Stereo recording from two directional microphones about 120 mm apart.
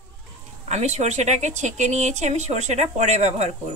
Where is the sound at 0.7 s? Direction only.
70° right (ahead or behind).